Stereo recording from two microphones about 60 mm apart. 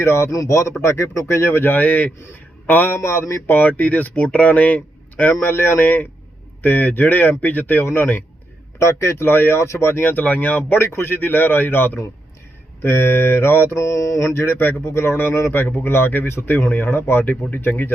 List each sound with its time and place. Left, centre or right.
0.0 s speech: left
0.3 s mantra: left
0.8 s speech: left
3.0 s speech: left
3.5 s speech: left
5.4 s speech: left
8.8 s speech: left
10.2 s speech: left
10.8 s speech: left
13.7 s mantra: left
14.3 s speech: left